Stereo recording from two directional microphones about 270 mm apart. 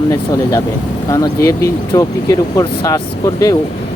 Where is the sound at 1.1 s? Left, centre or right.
Centre.